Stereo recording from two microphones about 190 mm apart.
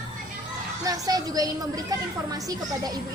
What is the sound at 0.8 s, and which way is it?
A child's voice, 20° right (ahead or behind).